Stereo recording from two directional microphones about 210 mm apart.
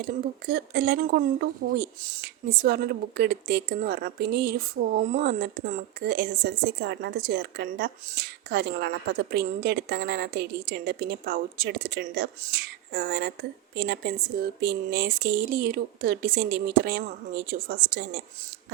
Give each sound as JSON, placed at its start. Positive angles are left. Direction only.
{"t": 0.0, "sound": "a woman's voice", "side_deg": -45}